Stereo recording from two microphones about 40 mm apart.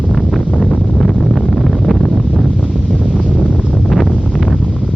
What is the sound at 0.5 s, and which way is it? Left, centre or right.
Wind noise, centre.